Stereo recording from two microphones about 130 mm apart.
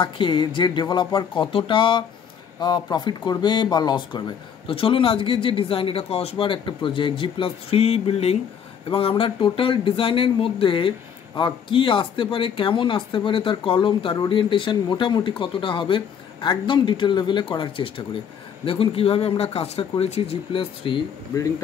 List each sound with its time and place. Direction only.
0.0 s speech: 40° left (ahead or behind)